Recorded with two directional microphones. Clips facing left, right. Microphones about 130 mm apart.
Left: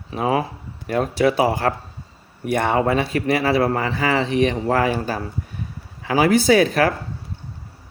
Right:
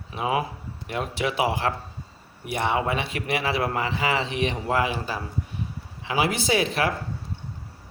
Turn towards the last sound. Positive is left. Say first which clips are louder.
# left 8 dB
turn(degrees=45)  # may be behind; listen again after turning